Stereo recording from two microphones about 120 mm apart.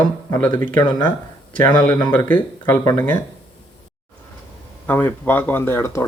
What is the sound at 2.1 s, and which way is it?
Speech, 15° left (ahead or behind).